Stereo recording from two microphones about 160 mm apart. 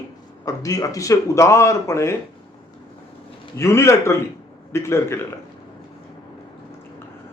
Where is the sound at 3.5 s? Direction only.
15° left (ahead or behind).